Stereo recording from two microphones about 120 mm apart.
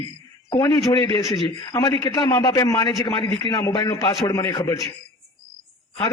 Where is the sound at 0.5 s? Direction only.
30° left (ahead or behind).